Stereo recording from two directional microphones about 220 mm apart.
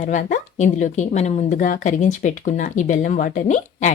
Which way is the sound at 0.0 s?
35° left (ahead or behind).